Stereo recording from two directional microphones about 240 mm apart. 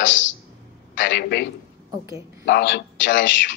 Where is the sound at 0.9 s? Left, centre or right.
Left.